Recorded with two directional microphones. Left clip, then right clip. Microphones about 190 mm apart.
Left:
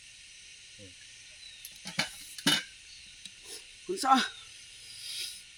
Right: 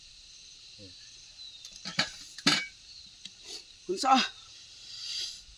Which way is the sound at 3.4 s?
20° right (ahead or behind).